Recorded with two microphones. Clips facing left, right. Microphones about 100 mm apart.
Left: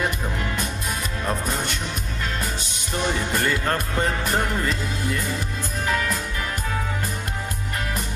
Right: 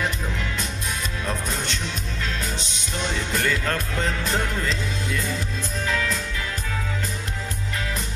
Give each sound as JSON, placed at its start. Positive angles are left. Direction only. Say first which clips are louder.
{"t": 2.4, "sound": "music", "louder": "left 1 dB", "side_deg": 50}